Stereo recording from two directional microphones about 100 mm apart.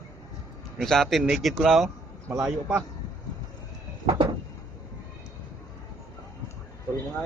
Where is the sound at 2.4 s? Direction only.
15° right (ahead or behind).